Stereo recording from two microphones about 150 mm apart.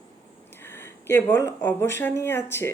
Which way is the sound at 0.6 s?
15° left (ahead or behind).